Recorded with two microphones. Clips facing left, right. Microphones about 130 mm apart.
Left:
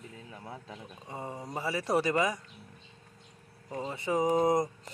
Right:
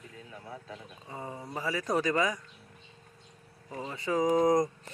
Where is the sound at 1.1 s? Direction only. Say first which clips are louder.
Left 1 dB; 25° left (ahead or behind).